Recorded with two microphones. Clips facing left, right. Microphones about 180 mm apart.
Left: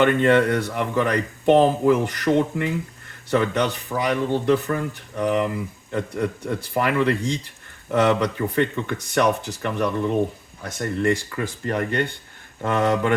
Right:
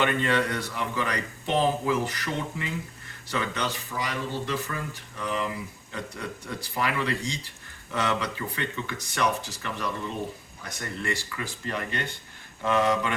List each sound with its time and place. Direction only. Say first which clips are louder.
0.0 s speech: left 8 dB; 55° left (ahead or behind)